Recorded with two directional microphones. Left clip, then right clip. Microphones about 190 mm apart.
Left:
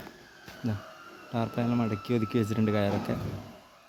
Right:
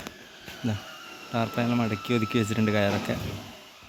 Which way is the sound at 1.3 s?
Centre (ahead or behind).